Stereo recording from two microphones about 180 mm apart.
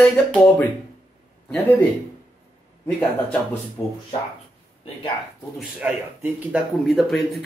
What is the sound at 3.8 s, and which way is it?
Speech, 20° left (ahead or behind).